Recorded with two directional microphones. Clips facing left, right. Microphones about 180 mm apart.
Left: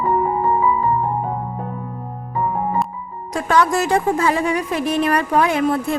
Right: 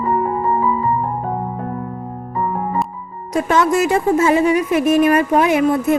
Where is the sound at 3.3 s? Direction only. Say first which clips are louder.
Right 2 dB; 20° right (ahead or behind).